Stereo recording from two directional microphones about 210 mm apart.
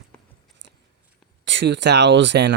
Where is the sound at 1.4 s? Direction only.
60° right (ahead or behind).